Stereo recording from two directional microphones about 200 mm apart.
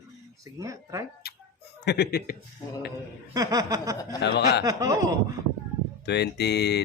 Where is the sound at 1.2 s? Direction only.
50° left (ahead or behind).